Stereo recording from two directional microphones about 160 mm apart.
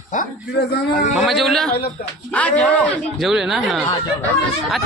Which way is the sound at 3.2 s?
Centre (ahead or behind).